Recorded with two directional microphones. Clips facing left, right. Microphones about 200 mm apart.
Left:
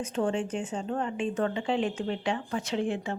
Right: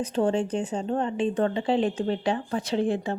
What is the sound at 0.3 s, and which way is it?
Speech, 40° right (ahead or behind).